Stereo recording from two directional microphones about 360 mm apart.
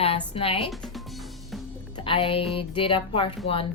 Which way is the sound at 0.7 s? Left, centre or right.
Centre.